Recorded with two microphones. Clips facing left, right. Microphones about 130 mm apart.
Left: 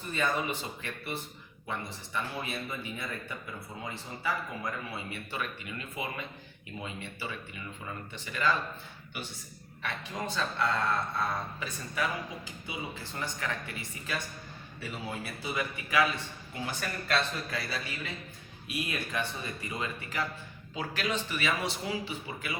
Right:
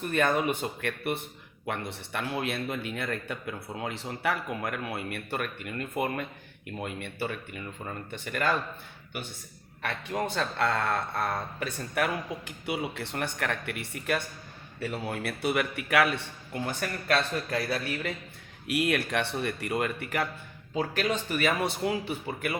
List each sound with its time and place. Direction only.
0.0 s a man's voice: 60° right (ahead or behind)
9.8 s a man's voice: 60° right (ahead or behind)
16.6 s a man's voice: 50° right (ahead or behind)
18.7 s speech: 75° right (ahead or behind)
20.7 s speech: 45° right (ahead or behind)